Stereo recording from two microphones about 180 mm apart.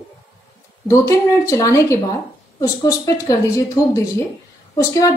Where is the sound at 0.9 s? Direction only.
15° left (ahead or behind).